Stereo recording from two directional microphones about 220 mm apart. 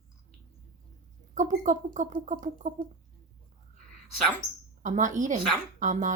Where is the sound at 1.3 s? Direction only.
35° right (ahead or behind).